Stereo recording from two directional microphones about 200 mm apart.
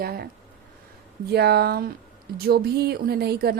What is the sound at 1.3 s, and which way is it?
A woman's voice, 55° right (ahead or behind).